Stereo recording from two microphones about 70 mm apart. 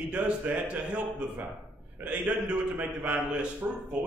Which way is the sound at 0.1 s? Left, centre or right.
Right.